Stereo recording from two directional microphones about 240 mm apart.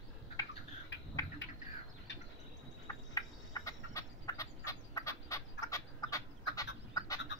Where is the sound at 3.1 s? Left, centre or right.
Centre.